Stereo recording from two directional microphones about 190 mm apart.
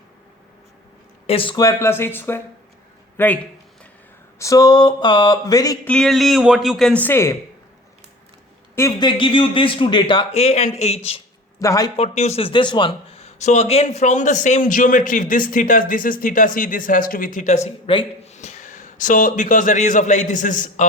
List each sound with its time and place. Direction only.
1.3 s speech: 25° left (ahead or behind); by 3.3 s 10° left (ahead or behind)
4.4 s a man's voice: 15° left (ahead or behind)
5.9 s a man's voice: centre (ahead or behind)
8.7 s a man's voice: 20° left (ahead or behind)
11.6 s speech: 15° left (ahead or behind)
11.9 s a man's voice: 35° left (ahead or behind)